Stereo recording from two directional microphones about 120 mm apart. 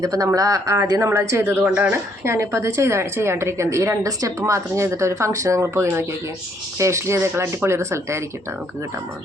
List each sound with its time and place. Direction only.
0.0 s speech: 30° right (ahead or behind)